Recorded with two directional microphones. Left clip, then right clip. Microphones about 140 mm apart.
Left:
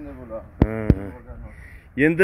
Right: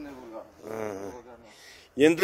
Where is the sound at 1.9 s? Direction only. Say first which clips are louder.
Left 1 dB; 40° right (ahead or behind).